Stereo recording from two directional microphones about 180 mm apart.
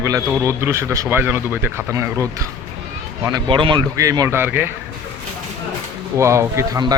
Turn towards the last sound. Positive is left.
turn(degrees=-20)  # may be behind; listen again after turning